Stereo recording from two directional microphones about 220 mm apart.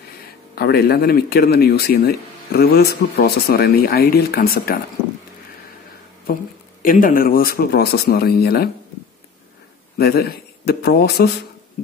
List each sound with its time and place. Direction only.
0.6 s speech: 45° left (ahead or behind)
6.8 s speech: 40° left (ahead or behind)
9.9 s speech: 45° left (ahead or behind)